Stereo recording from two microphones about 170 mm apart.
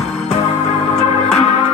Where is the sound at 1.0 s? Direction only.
40° left (ahead or behind).